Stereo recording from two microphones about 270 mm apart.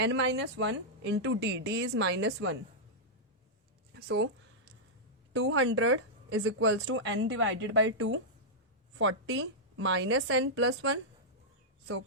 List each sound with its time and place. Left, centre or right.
0.0 s a woman's voice: right
3.9 s speech: right
5.3 s speech: right